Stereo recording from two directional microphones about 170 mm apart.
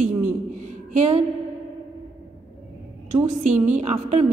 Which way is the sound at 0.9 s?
45° right (ahead or behind).